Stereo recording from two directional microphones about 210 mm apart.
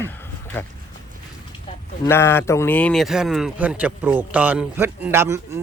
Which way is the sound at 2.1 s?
10° left (ahead or behind).